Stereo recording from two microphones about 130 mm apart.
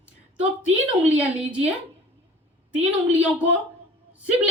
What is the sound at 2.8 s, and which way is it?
Speech, 55° right (ahead or behind).